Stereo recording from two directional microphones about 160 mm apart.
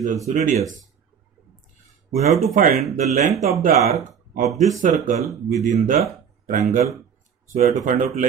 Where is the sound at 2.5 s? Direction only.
65° right (ahead or behind).